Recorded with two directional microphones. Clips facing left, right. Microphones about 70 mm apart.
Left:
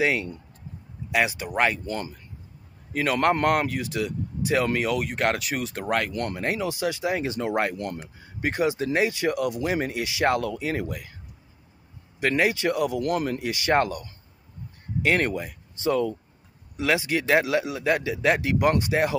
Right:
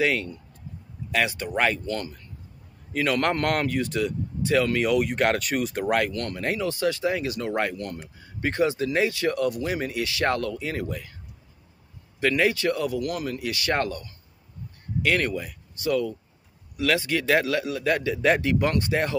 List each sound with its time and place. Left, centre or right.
0.0 s speech: centre
4.7 s speech: centre
6.1 s speech: left
12.2 s speech: centre
13.0 s speech: left
13.5 s speech: left